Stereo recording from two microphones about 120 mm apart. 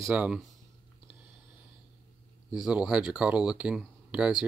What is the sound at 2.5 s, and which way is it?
Speech, 5° right (ahead or behind).